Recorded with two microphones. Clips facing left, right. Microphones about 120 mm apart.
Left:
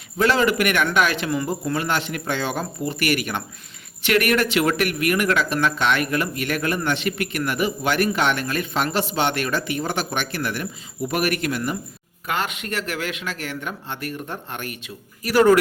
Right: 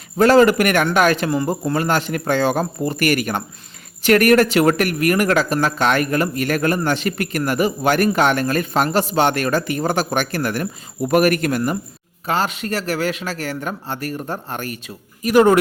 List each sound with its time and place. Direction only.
0.2 s a man's voice: 40° right (ahead or behind)
12.2 s speech: 35° right (ahead or behind)
15.2 s a man's voice: 20° right (ahead or behind)